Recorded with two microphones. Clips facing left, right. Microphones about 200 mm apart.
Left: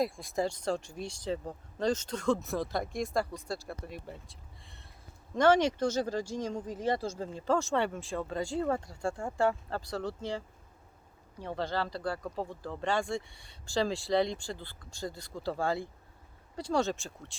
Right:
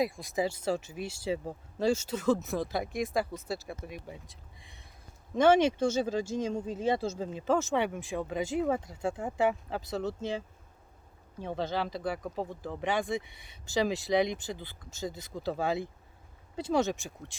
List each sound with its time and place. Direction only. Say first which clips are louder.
0.0 s speech: right 1 dB; centre (ahead or behind)
4.0 s speech: even; 15° right (ahead or behind)
11.4 s speech: right 1 dB; 20° right (ahead or behind)